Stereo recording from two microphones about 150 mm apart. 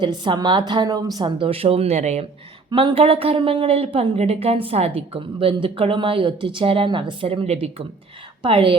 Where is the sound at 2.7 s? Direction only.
35° right (ahead or behind).